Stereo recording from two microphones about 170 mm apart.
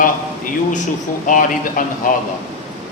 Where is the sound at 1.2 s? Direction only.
50° left (ahead or behind).